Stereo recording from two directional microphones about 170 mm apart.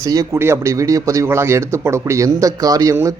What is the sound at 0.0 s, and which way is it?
Speech, 20° right (ahead or behind).